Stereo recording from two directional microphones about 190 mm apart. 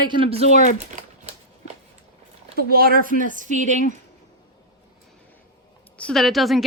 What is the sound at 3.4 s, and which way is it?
Speech, 40° right (ahead or behind).